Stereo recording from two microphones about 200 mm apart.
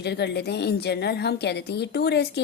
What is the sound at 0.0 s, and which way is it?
A woman's voice, 55° left (ahead or behind).